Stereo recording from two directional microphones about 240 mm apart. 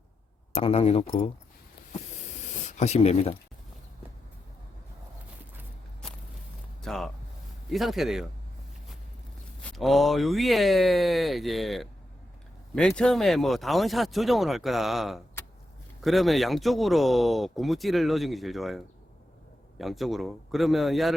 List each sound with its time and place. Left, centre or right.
0.5 s speech: left
2.4 s a sound: left
6.0 s walk: centre
6.8 s music: centre
7.7 s speech: centre
9.6 s speech: centre
19.8 s speech: centre